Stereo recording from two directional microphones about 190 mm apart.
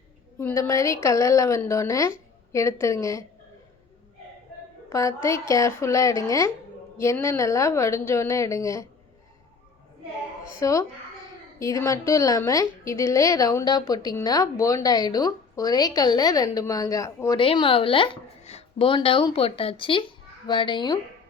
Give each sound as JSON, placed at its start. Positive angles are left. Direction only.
{"t": 0.3, "sound": "a woman's voice", "side_deg": 15}
{"t": 4.9, "sound": "a woman's voice", "side_deg": 15}
{"t": 10.6, "sound": "a woman's voice", "side_deg": 15}
{"t": 17.4, "sound": "a woman's voice", "side_deg": 30}